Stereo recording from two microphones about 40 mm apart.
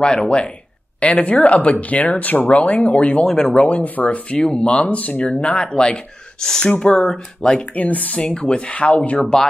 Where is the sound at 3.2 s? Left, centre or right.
Centre.